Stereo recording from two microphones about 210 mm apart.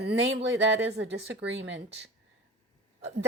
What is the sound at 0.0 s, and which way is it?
Speech, 60° right (ahead or behind).